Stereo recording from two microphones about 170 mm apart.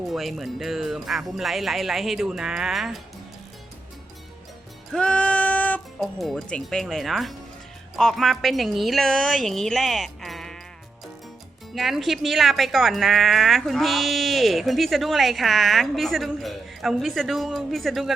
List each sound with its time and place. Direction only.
0.1 s speech: centre (ahead or behind)
4.9 s speech: 5° left (ahead or behind)
11.7 s speech: centre (ahead or behind)